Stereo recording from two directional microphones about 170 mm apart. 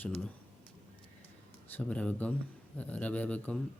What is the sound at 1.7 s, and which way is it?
Speech, 10° left (ahead or behind).